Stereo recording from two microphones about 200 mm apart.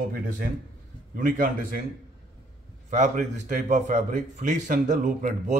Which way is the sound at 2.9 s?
40° right (ahead or behind).